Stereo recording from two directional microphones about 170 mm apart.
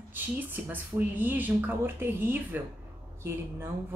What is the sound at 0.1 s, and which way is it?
A woman's voice, 10° right (ahead or behind).